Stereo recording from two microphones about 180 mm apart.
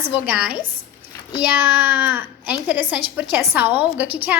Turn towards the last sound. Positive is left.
turn(degrees=-10)  # may be behind; listen again after turning